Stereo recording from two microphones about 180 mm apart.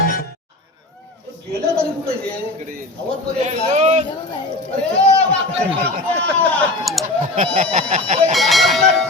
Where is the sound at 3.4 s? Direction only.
40° right (ahead or behind).